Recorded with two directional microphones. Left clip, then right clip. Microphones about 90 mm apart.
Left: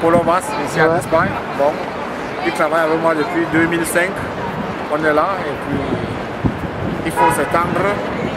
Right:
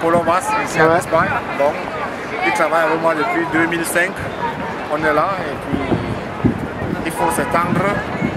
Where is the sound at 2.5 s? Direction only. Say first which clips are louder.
Left 1 dB; 10° right (ahead or behind).